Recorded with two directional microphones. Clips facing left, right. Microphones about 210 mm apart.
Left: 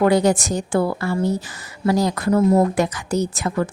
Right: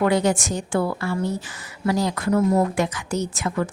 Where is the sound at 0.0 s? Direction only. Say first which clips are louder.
Left 4 dB; 40° left (ahead or behind).